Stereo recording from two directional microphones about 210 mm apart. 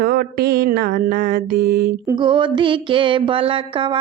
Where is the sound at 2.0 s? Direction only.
20° right (ahead or behind).